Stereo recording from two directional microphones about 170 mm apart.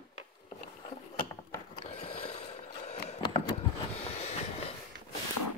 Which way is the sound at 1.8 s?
35° left (ahead or behind).